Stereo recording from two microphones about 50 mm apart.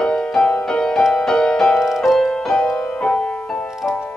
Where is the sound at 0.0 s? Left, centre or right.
Centre.